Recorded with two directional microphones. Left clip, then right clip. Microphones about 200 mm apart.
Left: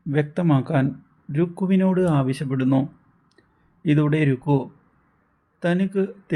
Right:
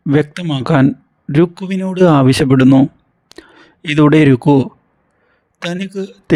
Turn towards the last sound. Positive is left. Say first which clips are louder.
# right 12 dB
turn(degrees=-50)  # may be behind; listen again after turning